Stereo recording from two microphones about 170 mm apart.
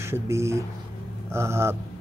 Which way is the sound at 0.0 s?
15° right (ahead or behind).